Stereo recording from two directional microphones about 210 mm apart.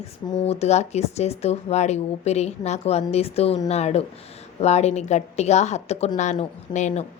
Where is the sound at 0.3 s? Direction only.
30° left (ahead or behind).